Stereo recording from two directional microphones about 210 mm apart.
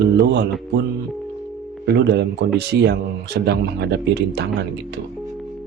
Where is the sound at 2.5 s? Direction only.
50° right (ahead or behind).